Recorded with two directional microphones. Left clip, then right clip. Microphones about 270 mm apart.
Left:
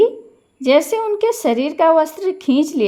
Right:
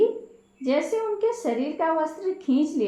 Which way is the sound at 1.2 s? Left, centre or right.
Left.